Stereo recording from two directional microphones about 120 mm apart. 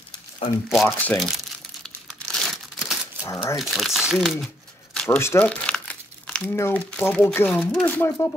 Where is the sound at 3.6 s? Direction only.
Centre (ahead or behind).